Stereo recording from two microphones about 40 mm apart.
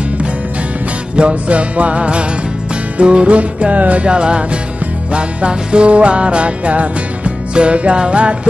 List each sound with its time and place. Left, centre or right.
1.1 s music: right